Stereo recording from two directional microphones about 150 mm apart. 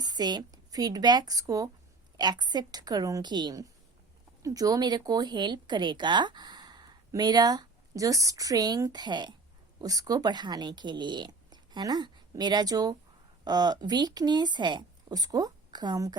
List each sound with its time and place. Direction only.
0.0 s speech: 25° right (ahead or behind)